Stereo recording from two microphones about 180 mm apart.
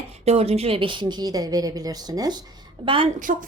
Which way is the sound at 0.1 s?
35° right (ahead or behind).